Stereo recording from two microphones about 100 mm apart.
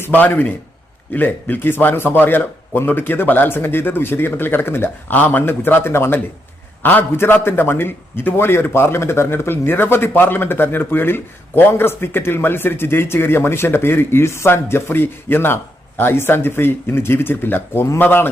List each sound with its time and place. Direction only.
0.0 s a man's voice: 20° left (ahead or behind)